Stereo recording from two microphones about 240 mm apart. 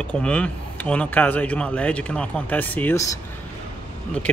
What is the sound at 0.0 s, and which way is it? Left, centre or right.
Speech, centre.